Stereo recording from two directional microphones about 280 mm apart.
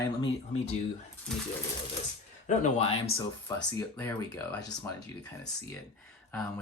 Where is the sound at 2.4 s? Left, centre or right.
Left.